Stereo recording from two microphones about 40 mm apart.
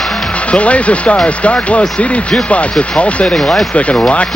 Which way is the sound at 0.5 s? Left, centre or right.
Left.